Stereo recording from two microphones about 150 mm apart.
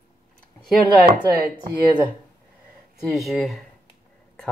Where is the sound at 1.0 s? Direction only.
75° right (ahead or behind).